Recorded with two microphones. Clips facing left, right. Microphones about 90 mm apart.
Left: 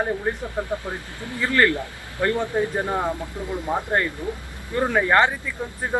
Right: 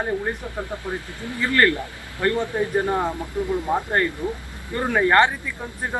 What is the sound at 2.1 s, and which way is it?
Speech, 20° left (ahead or behind).